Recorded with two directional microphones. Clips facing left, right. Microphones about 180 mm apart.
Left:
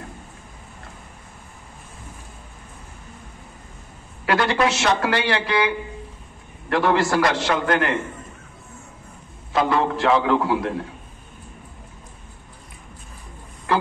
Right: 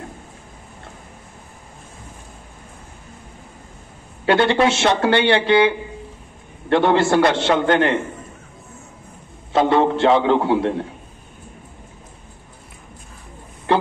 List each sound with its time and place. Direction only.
4.3 s speech: 30° right (ahead or behind)
9.5 s speech: 25° right (ahead or behind)
13.7 s a sound: 25° right (ahead or behind)